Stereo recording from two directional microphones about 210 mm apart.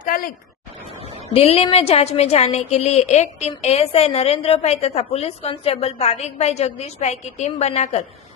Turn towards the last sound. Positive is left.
turn(degrees=30)  # may be behind; listen again after turning